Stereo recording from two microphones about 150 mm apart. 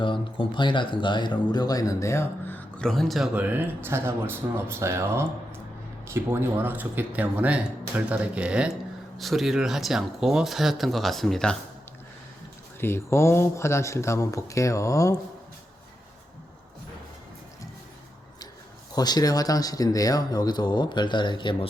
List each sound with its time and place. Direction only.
0.0 s speech: 35° left (ahead or behind); by 11.5 s 5° left (ahead or behind)
12.8 s speech: 15° left (ahead or behind)
18.9 s speech: 25° left (ahead or behind)